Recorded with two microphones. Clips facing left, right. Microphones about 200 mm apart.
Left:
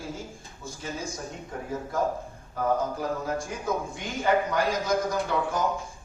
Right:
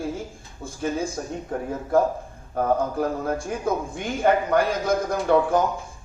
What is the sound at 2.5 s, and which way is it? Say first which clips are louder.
A man's voice: right 4 dB; 55° right (ahead or behind).